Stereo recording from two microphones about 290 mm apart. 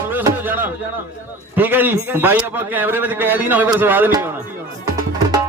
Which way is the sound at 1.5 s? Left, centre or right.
Centre.